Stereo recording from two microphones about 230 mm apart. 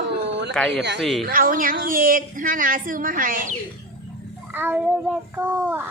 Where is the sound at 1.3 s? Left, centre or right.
Right.